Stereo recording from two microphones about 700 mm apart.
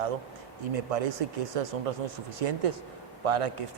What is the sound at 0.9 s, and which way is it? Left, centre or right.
A man's voice, right.